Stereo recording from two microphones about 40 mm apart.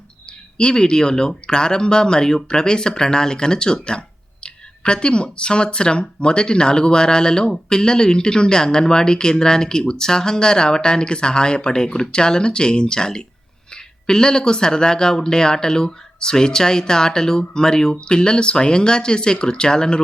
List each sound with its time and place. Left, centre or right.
0.5 s speech: left